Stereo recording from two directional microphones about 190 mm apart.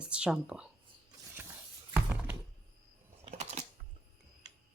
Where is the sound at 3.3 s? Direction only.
35° right (ahead or behind).